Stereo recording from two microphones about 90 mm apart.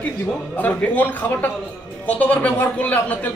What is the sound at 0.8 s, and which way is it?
A man's voice, 20° left (ahead or behind).